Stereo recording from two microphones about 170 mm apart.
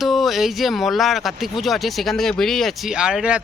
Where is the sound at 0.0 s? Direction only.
Centre (ahead or behind).